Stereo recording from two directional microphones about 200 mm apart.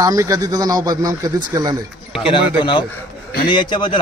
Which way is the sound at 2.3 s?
25° left (ahead or behind).